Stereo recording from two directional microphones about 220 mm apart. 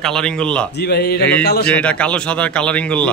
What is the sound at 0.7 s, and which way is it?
Speech, 45° left (ahead or behind).